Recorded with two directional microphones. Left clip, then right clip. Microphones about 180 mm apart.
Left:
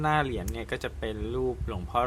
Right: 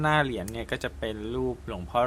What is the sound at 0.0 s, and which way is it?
Speech, 10° right (ahead or behind).